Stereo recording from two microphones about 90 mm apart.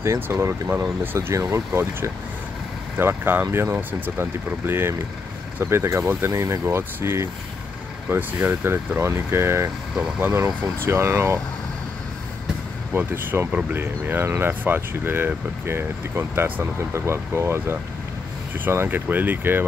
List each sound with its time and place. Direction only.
0.0 s speech: 35° right (ahead or behind)
12.9 s speech: 25° right (ahead or behind)